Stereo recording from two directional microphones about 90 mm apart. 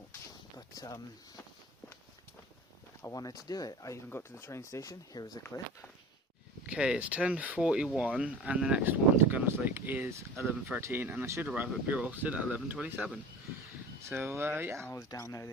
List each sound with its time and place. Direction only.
0.5 s a sound: 45° left (ahead or behind)
3.0 s speech: 40° left (ahead or behind)
4.1 s speech: 30° left (ahead or behind); by 5.4 s 45° left (ahead or behind)
6.7 s speech: 10° right (ahead or behind)
8.8 s speech: 20° right (ahead or behind)
14.0 s speech: 30° right (ahead or behind)
14.9 s speech: 40° left (ahead or behind)